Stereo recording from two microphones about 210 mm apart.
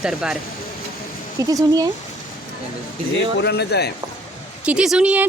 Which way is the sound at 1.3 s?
15° right (ahead or behind).